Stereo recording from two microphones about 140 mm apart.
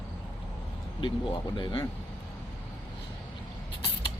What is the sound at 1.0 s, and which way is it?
Speech, 35° left (ahead or behind).